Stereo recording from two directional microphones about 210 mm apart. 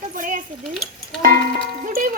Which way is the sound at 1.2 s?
40° right (ahead or behind).